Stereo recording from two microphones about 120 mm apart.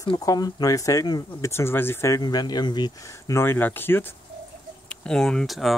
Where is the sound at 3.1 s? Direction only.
20° left (ahead or behind).